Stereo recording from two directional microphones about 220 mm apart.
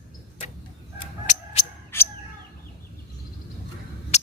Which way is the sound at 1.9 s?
10° left (ahead or behind).